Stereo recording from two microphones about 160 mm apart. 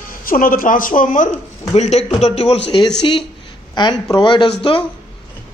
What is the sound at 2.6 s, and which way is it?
A man's voice, 30° left (ahead or behind).